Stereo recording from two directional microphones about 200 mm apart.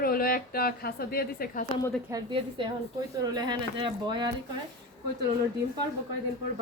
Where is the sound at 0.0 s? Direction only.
45° left (ahead or behind).